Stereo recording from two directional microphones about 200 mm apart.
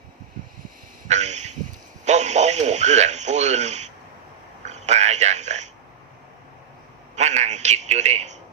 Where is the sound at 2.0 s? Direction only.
35° right (ahead or behind).